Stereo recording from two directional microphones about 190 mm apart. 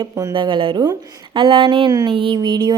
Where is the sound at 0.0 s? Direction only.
20° right (ahead or behind).